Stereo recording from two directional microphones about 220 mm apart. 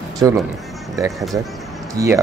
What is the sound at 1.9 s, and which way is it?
Speech, 15° right (ahead or behind).